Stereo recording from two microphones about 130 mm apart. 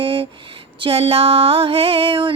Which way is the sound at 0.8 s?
45° right (ahead or behind).